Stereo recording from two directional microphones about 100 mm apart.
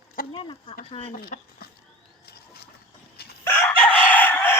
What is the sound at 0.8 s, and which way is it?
Speech, 80° left.